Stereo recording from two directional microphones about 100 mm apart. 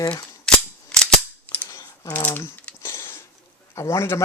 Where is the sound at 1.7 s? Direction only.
40° left (ahead or behind).